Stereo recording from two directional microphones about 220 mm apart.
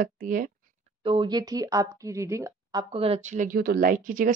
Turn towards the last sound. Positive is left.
turn(degrees=-40)  # may be behind; listen again after turning